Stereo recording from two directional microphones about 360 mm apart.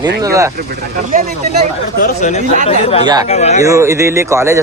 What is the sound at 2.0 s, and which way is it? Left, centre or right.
Speech, centre.